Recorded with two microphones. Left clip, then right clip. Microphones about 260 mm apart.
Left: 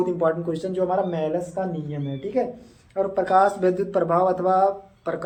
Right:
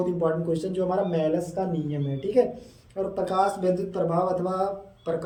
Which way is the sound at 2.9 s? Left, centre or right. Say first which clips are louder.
Left 6 dB; centre.